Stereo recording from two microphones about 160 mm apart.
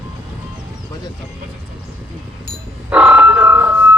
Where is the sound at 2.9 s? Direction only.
10° right (ahead or behind).